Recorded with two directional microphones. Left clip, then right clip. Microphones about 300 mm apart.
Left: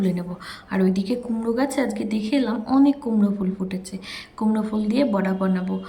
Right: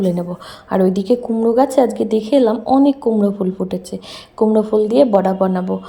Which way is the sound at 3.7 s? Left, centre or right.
Centre.